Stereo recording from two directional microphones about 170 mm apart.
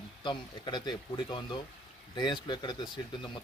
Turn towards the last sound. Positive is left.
turn(degrees=25)  # may be behind; listen again after turning